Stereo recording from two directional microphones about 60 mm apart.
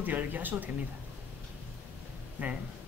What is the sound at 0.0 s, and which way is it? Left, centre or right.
Speech, right.